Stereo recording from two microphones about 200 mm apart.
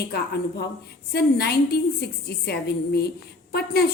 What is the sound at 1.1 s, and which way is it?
A woman's voice, 55° left (ahead or behind).